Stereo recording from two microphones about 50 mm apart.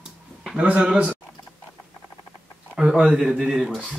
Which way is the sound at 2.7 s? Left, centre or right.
Centre.